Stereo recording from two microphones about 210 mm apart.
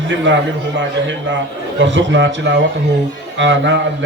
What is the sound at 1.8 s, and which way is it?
A man's voice, 60° right (ahead or behind).